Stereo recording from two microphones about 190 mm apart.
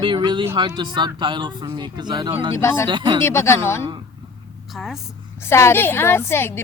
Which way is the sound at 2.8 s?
25° right (ahead or behind).